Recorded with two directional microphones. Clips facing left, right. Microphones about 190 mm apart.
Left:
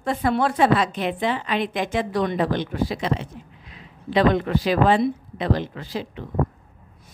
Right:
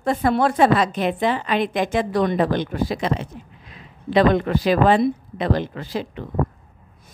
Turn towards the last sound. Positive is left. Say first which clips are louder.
# right 3 dB
turn(degrees=-55)  # may be behind; listen again after turning